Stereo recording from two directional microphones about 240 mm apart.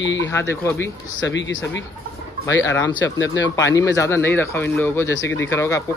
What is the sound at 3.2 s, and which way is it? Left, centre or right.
Speech, left.